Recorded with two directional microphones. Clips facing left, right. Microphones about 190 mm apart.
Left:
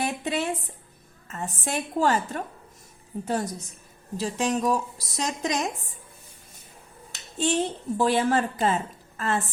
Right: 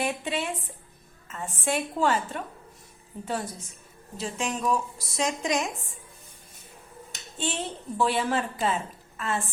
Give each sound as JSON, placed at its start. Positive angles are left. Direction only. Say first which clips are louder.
{"t": 0.0, "sound": "a sound", "louder": "left 2 dB", "side_deg": 40}
{"t": 1.3, "sound": "a woman's voice", "louder": "right 1 dB", "side_deg": 40}
{"t": 7.3, "sound": "a woman's voice", "louder": "left 7 dB", "side_deg": 40}